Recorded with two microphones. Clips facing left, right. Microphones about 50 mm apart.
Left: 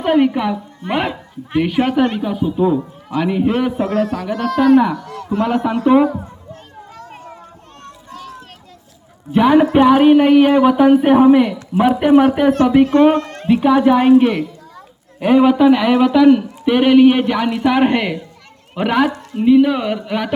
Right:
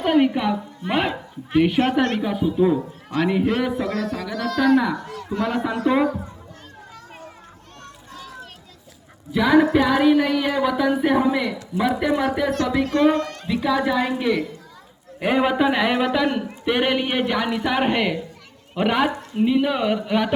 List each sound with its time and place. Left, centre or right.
0.0 s a woman's voice: centre
3.4 s a man's voice: centre
3.8 s a woman's voice: left
5.0 s a man's voice: left
5.4 s a woman's voice: left
6.9 s a sound: left
9.3 s a man's voice: left
15.2 s speech: centre